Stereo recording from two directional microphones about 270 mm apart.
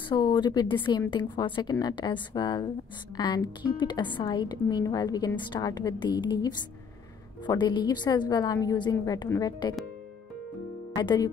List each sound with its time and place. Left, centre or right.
0.1 s speech: centre
11.0 s speech: centre